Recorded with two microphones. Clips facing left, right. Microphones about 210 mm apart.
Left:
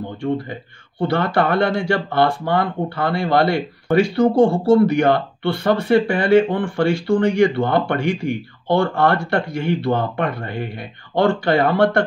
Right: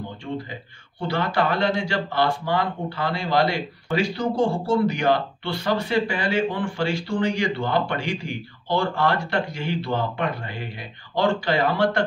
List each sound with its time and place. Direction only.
1.0 s speech: 55° left (ahead or behind)